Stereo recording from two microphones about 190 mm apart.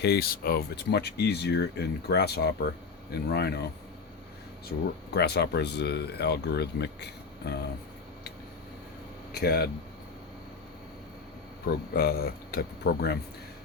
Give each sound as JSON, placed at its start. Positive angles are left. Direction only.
{"t": 0.0, "sound": "speech", "side_deg": 55}
{"t": 5.1, "sound": "speech", "side_deg": 60}
{"t": 9.3, "sound": "speech", "side_deg": 55}
{"t": 11.7, "sound": "speech", "side_deg": 50}